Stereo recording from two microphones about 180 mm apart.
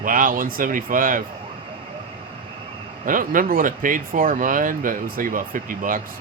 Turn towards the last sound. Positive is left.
turn(degrees=-50)  # may be behind; listen again after turning